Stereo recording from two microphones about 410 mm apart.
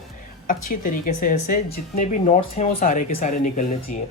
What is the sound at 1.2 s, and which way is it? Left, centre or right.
Speech, centre.